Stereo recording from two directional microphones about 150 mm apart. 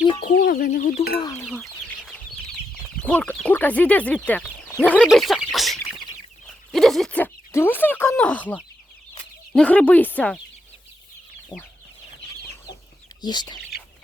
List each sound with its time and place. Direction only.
0.2 s speech: 75° left (ahead or behind)
1.2 s speech: 20° left (ahead or behind)
1.5 s chicken: 5° left (ahead or behind)
3.0 s speech: 10° left (ahead or behind)
5.0 s a sound: centre (ahead or behind)
9.5 s speech: 10° left (ahead or behind)
13.2 s speech: 30° left (ahead or behind)